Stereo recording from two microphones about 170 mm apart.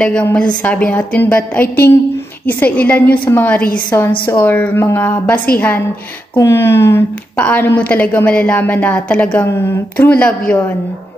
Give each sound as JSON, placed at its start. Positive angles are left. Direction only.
{"t": 0.0, "sound": "a woman's voice", "side_deg": 10}